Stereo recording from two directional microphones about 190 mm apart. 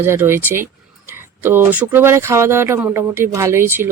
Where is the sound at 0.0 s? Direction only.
10° right (ahead or behind).